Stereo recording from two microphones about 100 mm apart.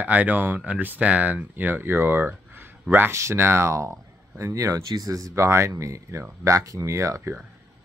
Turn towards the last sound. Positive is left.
turn(degrees=-30)  # may be behind; listen again after turning